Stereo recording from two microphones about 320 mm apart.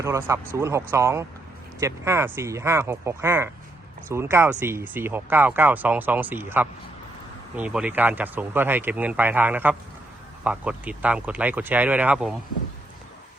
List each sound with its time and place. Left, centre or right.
0.0 s speech: centre